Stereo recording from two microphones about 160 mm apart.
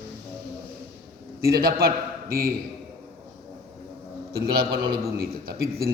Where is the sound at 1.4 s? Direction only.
70° right (ahead or behind).